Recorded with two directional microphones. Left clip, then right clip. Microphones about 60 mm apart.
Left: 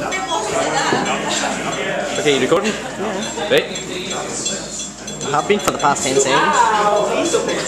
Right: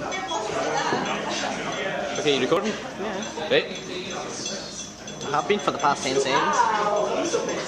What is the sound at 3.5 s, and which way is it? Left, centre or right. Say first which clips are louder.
Speech: left 6 dB; right.